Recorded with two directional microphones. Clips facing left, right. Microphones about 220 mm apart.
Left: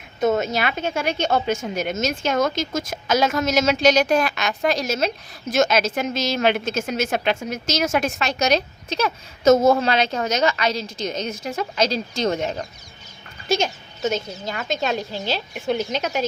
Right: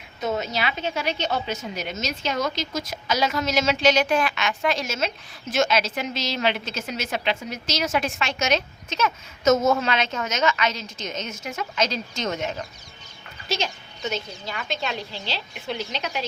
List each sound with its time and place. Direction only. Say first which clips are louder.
0.2 s a woman's voice: left 6 dB; 50° left (ahead or behind)
13.5 s a woman's voice: left 6 dB; 45° left (ahead or behind)